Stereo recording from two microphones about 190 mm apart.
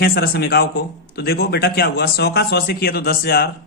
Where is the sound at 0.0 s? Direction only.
55° left (ahead or behind).